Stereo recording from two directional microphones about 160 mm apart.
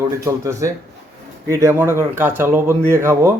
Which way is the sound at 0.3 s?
20° right (ahead or behind).